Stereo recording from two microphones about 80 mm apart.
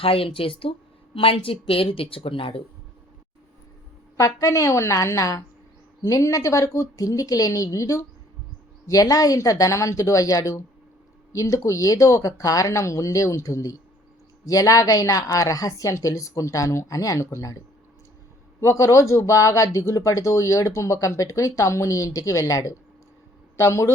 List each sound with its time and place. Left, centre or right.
0.4 s speech: left
2.0 s speech: left
4.2 s speech: left
18.6 s speech: left